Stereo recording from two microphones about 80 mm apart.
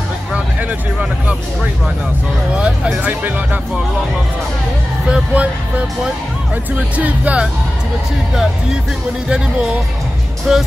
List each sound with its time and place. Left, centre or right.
2.5 s speech: centre
5.1 s speech: centre
6.7 s speech: centre
10.5 s speech: centre